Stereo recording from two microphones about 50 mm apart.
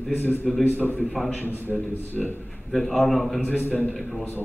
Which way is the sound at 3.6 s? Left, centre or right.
Left.